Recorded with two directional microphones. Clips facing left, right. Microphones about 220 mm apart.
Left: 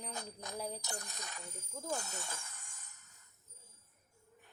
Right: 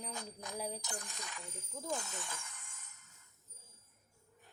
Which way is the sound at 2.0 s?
40° left (ahead or behind).